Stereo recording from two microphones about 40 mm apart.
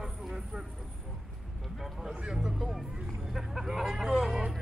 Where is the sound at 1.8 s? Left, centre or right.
Centre.